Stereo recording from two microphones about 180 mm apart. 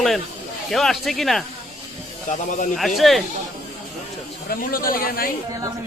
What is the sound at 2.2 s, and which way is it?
Speech, 45° left (ahead or behind).